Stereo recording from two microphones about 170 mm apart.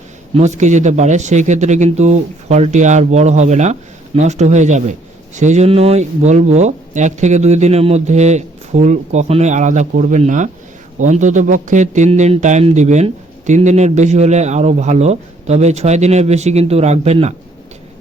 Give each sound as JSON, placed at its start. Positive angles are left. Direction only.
{"t": 0.3, "sound": "a man's voice", "side_deg": -40}